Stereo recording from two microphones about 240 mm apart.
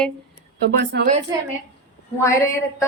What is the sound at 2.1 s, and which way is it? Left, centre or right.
Speech, centre.